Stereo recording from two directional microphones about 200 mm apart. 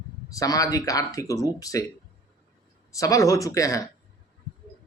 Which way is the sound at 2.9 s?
15° left (ahead or behind).